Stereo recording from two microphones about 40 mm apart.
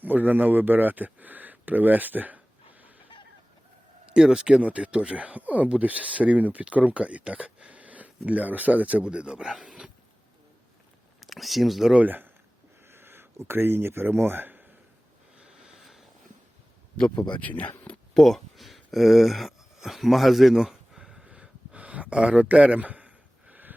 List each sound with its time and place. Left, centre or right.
0.0 s speech: right
4.2 s speech: centre
4.6 s speech: right
9.0 s speech: right
11.2 s speech: centre
12.0 s speech: right
12.9 s speech: right
15.4 s a sound: centre
15.8 s a sound: centre
17.4 s speech: left
18.1 s speech: centre
21.2 s a sound: right